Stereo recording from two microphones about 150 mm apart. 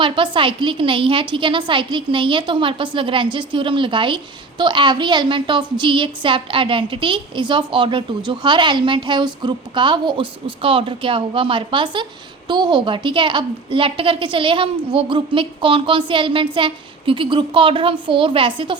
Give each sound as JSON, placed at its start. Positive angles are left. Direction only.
{"t": 0.0, "sound": "a woman's voice", "side_deg": -35}